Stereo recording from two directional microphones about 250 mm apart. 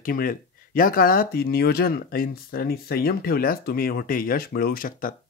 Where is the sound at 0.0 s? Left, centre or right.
Left.